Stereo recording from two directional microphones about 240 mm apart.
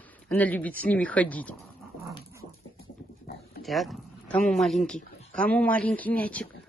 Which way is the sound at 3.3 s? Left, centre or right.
Left.